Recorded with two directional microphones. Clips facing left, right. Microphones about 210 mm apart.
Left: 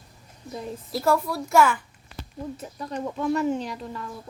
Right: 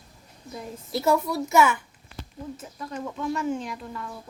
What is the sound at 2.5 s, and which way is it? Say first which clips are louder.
Speech: left 3 dB; 35° left (ahead or behind).